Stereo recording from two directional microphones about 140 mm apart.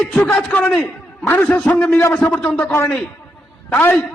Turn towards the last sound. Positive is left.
turn(degrees=10)  # may be behind; listen again after turning